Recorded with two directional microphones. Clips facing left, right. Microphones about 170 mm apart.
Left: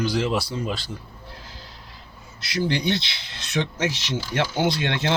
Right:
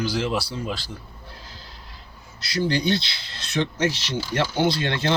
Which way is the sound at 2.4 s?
20° left (ahead or behind).